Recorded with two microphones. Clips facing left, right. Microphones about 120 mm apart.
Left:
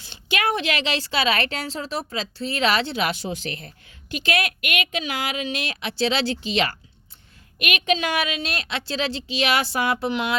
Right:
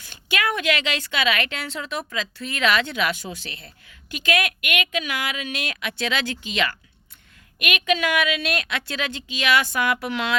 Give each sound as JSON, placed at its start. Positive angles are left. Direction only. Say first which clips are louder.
{"t": 0.0, "sound": "a woman's voice", "louder": "left 1 dB", "side_deg": 30}
{"t": 3.3, "sound": "a woman's voice", "louder": "left 7 dB", "side_deg": -35}
{"t": 4.1, "sound": "a woman's voice", "louder": "right 1 dB", "side_deg": 35}